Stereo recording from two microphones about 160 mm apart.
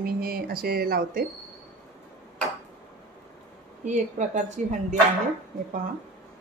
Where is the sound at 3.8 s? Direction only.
50° right (ahead or behind).